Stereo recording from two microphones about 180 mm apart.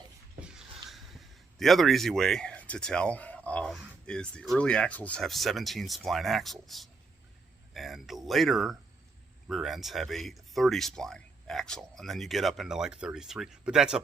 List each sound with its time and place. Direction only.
0.4 s speech: centre (ahead or behind)